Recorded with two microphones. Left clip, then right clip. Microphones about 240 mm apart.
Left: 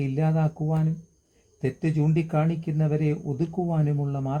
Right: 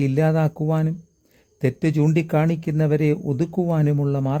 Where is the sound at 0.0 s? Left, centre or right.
Right.